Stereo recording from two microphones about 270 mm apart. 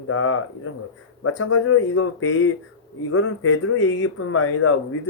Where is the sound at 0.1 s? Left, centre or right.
Left.